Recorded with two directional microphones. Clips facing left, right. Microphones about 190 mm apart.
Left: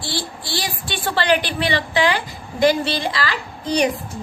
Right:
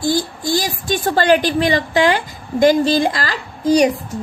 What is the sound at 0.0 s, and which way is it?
A woman's voice, 45° right (ahead or behind).